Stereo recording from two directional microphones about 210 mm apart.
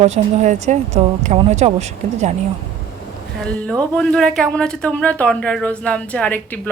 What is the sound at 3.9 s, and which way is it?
Speech, centre (ahead or behind).